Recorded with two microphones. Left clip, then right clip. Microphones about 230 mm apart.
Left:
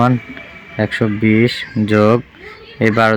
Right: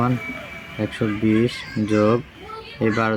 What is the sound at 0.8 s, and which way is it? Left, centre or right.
Speech, left.